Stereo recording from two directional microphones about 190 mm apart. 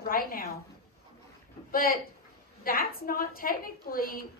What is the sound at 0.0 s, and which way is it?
Speech, 50° left (ahead or behind).